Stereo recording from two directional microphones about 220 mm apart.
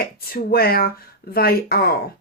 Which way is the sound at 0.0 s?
45° left (ahead or behind).